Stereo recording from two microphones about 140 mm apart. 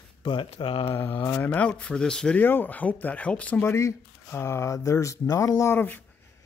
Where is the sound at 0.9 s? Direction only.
15° left (ahead or behind).